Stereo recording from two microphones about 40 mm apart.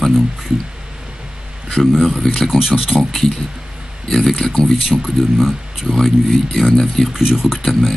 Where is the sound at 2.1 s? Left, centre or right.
Centre.